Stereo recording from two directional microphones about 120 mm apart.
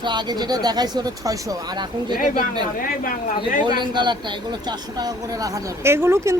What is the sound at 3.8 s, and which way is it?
Speech, 40° right (ahead or behind).